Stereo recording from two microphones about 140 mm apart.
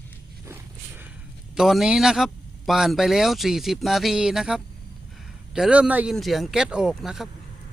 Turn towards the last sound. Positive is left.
turn(degrees=0)  # may be behind; listen again after turning